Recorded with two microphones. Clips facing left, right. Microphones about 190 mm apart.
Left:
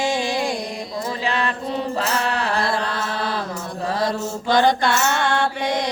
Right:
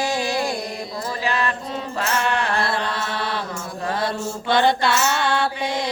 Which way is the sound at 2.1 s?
35° left (ahead or behind).